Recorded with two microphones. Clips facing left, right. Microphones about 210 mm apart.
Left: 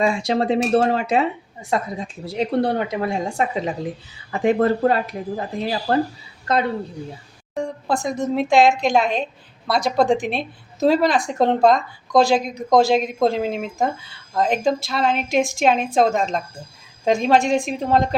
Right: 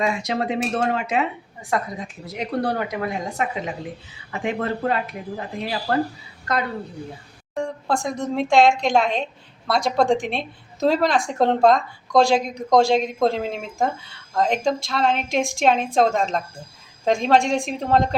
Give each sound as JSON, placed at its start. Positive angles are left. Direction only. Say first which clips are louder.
{"t": 0.0, "sound": "a woman's voice", "louder": "left 4 dB", "side_deg": 30}
{"t": 7.5, "sound": "a woman's voice", "louder": "left 1 dB", "side_deg": 0}